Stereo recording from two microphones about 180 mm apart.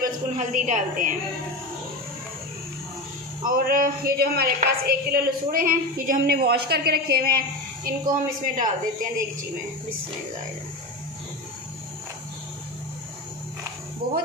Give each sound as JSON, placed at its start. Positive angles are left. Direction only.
{"t": 0.0, "sound": "a woman's voice", "side_deg": -45}
{"t": 3.4, "sound": "a woman's voice", "side_deg": -50}
{"t": 14.0, "sound": "a woman's voice", "side_deg": -55}